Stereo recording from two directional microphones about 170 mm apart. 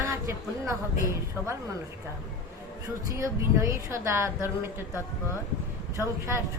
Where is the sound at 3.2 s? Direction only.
15° right (ahead or behind).